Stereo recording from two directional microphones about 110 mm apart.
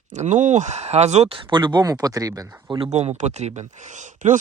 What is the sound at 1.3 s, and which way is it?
Speech, 45° right (ahead or behind).